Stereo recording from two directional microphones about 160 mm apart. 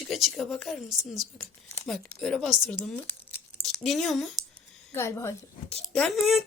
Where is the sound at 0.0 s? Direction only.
Centre (ahead or behind).